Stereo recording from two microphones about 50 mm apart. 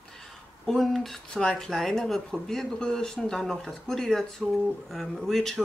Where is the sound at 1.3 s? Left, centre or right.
Centre.